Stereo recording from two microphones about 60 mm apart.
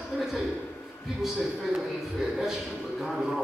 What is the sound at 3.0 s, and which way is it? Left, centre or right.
Speech, centre.